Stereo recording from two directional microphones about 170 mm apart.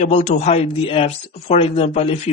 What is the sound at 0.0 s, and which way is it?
Speech, 40° left (ahead or behind).